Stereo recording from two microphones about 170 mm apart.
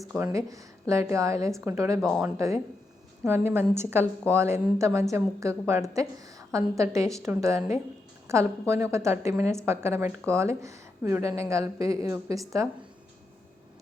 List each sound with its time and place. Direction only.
0.2 s a woman's voice: 15° right (ahead or behind)
2.0 s speech: centre (ahead or behind)
2.2 s a woman's voice: 15° right (ahead or behind)